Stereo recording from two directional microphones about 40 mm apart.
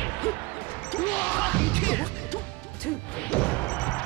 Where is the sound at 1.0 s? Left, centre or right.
Left.